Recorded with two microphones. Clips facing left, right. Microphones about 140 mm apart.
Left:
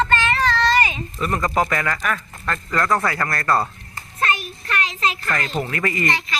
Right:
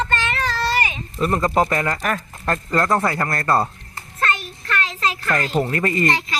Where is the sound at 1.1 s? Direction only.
30° right (ahead or behind).